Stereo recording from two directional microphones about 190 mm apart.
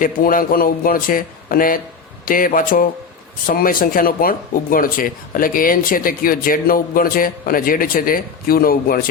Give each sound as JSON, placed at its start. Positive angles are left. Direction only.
{"t": 0.0, "sound": "speech", "side_deg": 45}